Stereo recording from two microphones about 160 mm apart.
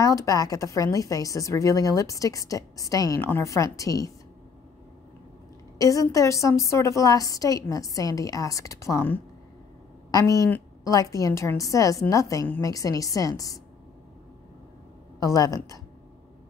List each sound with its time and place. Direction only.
0.0 s a woman's voice: 20° left (ahead or behind)
5.8 s a woman's voice: 20° left (ahead or behind)
15.1 s a woman's voice: 20° left (ahead or behind)